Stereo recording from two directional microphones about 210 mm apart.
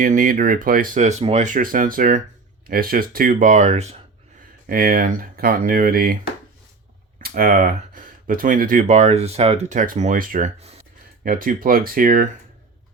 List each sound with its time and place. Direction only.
0.0 s speech: 40° right (ahead or behind)
4.6 s speech: 45° right (ahead or behind)
7.2 s speech: 45° right (ahead or behind)
11.2 s speech: 45° right (ahead or behind)